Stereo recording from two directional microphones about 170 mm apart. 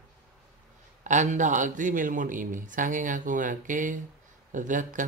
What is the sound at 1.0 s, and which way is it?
Speech, 45° right (ahead or behind).